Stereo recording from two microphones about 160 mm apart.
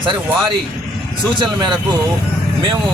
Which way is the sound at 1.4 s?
30° right (ahead or behind).